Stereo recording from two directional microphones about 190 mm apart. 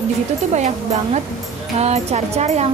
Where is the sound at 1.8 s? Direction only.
35° right (ahead or behind).